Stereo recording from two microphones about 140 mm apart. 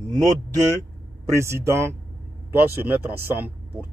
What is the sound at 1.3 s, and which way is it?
Speech, 20° right (ahead or behind).